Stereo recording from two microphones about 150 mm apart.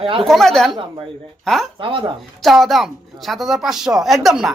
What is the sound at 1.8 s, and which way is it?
Speech, 35° right (ahead or behind).